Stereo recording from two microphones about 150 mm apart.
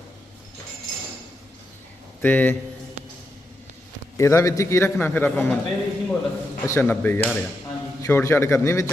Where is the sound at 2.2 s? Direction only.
10° left (ahead or behind).